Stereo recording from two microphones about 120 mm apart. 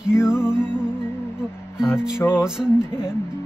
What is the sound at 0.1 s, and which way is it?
Music, 20° left (ahead or behind).